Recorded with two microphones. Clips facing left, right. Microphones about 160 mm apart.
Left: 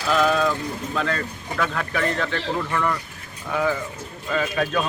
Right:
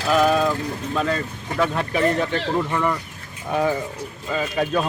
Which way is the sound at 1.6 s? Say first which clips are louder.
Right 4 dB; 25° right (ahead or behind).